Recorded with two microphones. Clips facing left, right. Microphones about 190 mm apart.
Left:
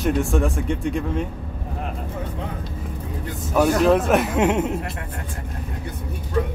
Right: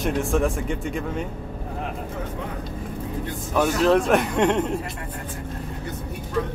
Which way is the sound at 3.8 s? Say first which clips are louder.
Left 1 dB; centre (ahead or behind).